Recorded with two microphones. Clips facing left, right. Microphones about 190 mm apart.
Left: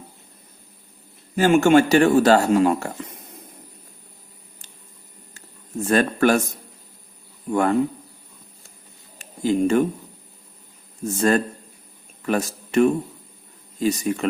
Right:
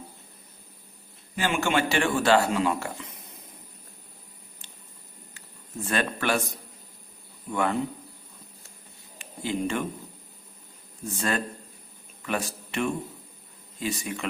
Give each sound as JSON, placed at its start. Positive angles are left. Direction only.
{"t": 1.4, "sound": "speech", "side_deg": 45}
{"t": 5.8, "sound": "speech", "side_deg": 45}
{"t": 7.5, "sound": "speech", "side_deg": 45}
{"t": 9.1, "sound": "a sound", "side_deg": 40}
{"t": 11.0, "sound": "speech", "side_deg": 45}